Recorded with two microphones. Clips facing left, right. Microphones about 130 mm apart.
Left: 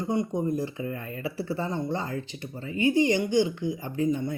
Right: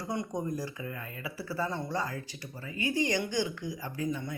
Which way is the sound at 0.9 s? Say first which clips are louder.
Left 7 dB; 30° left (ahead or behind).